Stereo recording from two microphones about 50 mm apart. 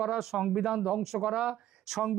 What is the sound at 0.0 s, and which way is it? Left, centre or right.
Speech, centre.